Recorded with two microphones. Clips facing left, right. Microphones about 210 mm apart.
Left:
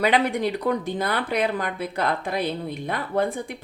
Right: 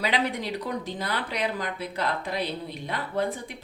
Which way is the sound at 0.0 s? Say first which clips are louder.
Left 6 dB; 55° left (ahead or behind).